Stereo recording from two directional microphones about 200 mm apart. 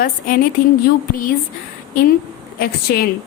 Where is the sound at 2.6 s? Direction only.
50° left (ahead or behind).